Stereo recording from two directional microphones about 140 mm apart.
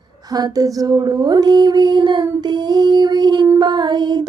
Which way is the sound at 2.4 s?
30° right (ahead or behind).